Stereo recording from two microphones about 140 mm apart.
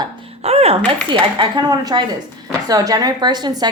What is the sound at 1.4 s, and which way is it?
A woman's voice, 30° right (ahead or behind).